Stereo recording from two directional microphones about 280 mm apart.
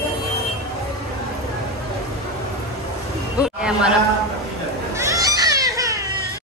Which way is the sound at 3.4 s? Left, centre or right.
Centre.